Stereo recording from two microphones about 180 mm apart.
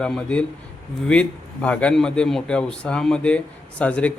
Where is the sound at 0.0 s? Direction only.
5° left (ahead or behind).